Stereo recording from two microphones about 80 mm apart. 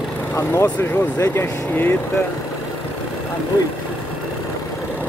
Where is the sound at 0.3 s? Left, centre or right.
Left.